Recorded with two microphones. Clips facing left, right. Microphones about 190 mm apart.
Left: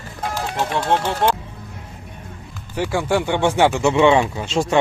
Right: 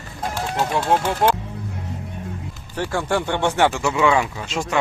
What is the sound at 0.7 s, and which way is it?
Speech, 5° right (ahead or behind).